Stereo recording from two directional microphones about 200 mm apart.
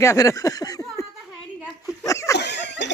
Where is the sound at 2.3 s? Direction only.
60° left (ahead or behind).